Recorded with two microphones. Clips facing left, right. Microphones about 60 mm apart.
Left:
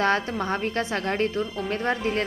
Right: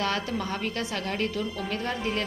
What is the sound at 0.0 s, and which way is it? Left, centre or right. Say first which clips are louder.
A woman's voice: left 5 dB; left.